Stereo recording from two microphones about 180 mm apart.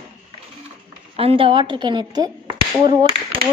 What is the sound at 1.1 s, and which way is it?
A woman's voice, 30° right (ahead or behind).